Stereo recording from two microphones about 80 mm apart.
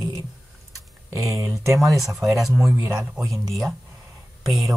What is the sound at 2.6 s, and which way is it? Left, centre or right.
Speech, right.